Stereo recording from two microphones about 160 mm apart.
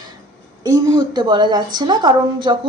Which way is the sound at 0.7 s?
25° right (ahead or behind).